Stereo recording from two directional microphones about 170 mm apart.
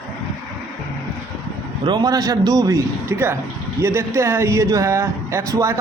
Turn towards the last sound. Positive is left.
turn(degrees=-15)  # may be behind; listen again after turning